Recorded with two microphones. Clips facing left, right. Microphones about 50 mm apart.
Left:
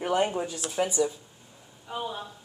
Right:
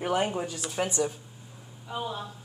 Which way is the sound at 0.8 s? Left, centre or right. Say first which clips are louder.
Left 2 dB; right.